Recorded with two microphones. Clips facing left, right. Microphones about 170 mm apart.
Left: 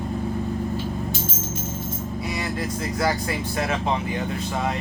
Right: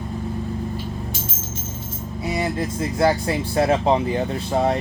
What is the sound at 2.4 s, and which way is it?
Speech, 25° right (ahead or behind).